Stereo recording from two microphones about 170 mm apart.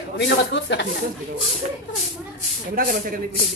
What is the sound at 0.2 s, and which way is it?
Speech, 90° left.